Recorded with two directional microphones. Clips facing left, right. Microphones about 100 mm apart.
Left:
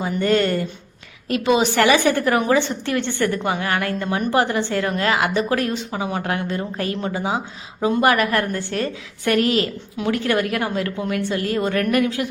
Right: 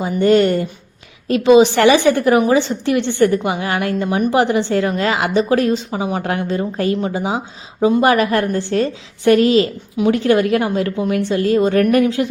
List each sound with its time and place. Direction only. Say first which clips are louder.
0.0 s a woman's voice: right 6 dB; 20° right (ahead or behind)